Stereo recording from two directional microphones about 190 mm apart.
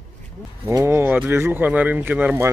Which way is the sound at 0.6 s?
15° right (ahead or behind).